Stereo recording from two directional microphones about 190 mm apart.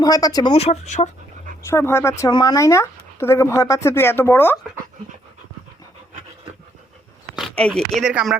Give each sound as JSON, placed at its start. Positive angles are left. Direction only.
{"t": 0.0, "sound": "speech", "side_deg": 20}
{"t": 0.5, "sound": "speech", "side_deg": 35}
{"t": 1.6, "sound": "speech", "side_deg": 15}
{"t": 7.3, "sound": "speech", "side_deg": 0}